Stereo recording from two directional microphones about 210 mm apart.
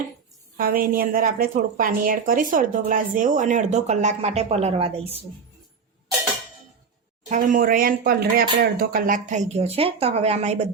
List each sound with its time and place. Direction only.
0.5 s a woman's voice: 45° right (ahead or behind); by 5.2 s 30° right (ahead or behind)
7.3 s a woman's voice: 35° right (ahead or behind)